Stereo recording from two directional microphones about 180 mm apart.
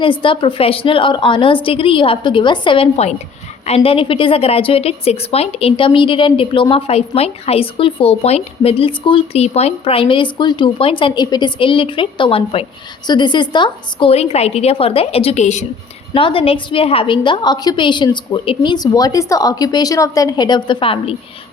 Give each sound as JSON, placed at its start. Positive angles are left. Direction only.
{"t": 0.0, "sound": "a woman's voice", "side_deg": 30}